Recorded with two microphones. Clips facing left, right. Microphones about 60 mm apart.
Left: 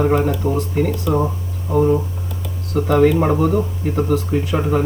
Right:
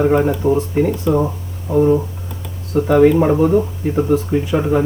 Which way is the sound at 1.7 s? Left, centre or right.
Left.